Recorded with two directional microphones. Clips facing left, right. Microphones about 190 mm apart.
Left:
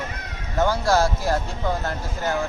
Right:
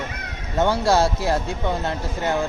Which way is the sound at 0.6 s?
25° right (ahead or behind).